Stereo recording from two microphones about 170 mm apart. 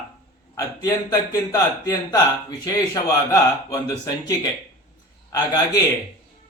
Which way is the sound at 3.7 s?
20° left (ahead or behind).